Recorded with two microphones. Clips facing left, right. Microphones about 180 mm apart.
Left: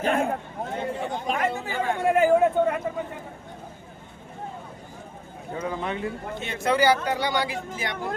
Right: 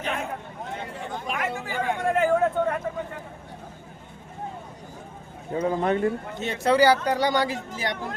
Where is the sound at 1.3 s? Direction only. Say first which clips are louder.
Left 3 dB; 35° left (ahead or behind).